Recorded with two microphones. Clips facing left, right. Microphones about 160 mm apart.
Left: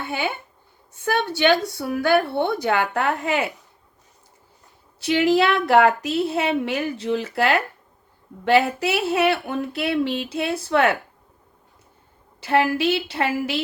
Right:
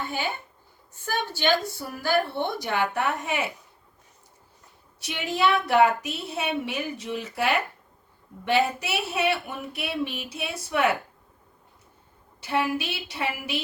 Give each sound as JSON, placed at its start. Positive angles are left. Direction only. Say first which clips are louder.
{"t": 0.0, "sound": "a woman's voice", "louder": "left 4 dB", "side_deg": 70}
{"t": 5.0, "sound": "speech", "louder": "left 7 dB", "side_deg": 90}
{"t": 12.5, "sound": "speech", "louder": "left 7 dB", "side_deg": 75}